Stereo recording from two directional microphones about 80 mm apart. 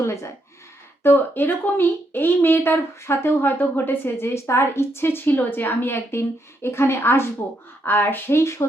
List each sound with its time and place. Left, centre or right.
0.0 s gasp: left
1.0 s speech: left